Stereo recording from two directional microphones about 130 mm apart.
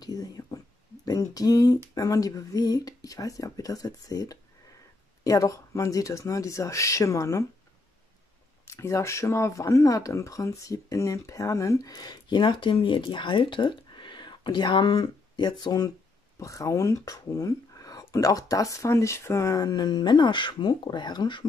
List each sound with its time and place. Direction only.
0.0 s a sound: 30° left (ahead or behind)
1.0 s speech: 25° left (ahead or behind)
8.6 s speech: 20° left (ahead or behind)